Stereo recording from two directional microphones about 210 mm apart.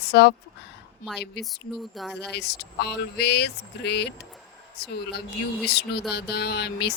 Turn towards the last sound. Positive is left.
turn(degrees=50)  # may be behind; listen again after turning